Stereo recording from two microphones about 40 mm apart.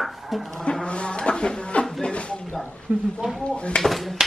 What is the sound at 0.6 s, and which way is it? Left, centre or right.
Speech, left.